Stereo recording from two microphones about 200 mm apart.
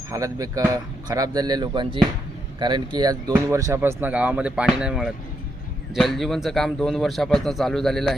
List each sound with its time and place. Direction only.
0.1 s a man's voice: 15° right (ahead or behind); by 8.1 s centre (ahead or behind)